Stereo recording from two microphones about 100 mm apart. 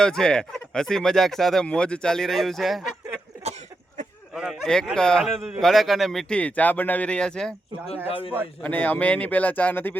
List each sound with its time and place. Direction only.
0.0 s speech: 5° left (ahead or behind)
4.6 s speech: 5° left (ahead or behind)
8.0 s a man's voice: 70° left (ahead or behind)
8.6 s speech: 15° left (ahead or behind)